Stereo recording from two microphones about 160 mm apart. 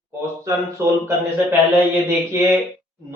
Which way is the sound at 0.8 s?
15° right (ahead or behind).